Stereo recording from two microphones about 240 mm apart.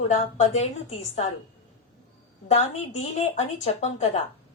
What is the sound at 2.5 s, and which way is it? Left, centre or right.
A woman's voice, left.